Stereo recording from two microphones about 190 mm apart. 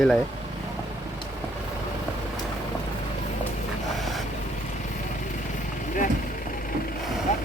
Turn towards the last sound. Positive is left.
turn(degrees=40)  # may be behind; listen again after turning